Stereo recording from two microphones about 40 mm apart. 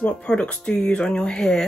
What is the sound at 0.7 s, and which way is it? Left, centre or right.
Speech, left.